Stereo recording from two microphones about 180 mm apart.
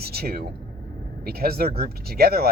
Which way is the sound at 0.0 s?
60° right (ahead or behind).